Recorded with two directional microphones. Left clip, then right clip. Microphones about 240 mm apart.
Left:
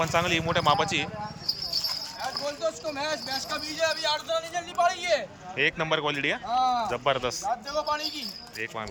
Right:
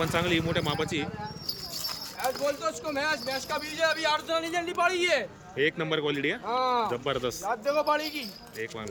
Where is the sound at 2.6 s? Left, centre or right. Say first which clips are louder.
Even; centre.